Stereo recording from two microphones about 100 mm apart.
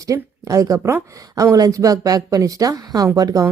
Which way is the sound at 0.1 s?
35° right (ahead or behind).